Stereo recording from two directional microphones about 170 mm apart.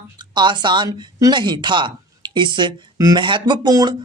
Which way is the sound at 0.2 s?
25° right (ahead or behind).